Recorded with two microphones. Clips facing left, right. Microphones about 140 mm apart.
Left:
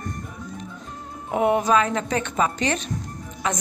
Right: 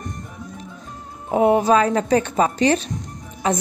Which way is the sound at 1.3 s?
30° right (ahead or behind).